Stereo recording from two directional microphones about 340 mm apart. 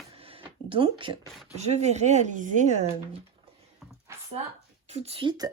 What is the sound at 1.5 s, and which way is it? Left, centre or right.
Speech, centre.